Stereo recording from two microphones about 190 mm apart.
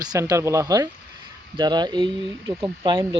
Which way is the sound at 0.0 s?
20° right (ahead or behind).